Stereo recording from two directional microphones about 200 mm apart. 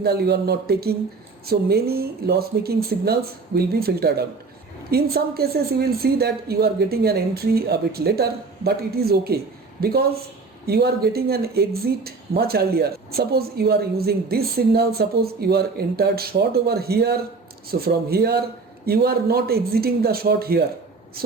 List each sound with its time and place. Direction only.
0.0 s speech: 55° right (ahead or behind)